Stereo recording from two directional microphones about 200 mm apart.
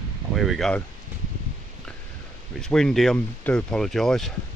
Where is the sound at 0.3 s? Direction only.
Centre (ahead or behind).